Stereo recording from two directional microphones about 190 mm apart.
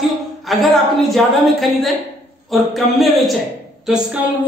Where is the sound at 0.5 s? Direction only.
Centre (ahead or behind).